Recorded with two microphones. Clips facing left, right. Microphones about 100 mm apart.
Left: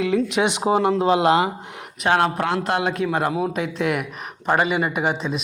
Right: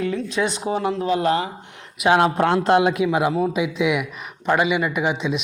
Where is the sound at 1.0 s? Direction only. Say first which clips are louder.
Left 2 dB; 90° left.